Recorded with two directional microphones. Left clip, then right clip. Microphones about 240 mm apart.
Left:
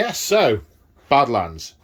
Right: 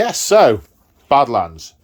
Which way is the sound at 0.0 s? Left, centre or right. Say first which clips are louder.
Right 6 dB; right.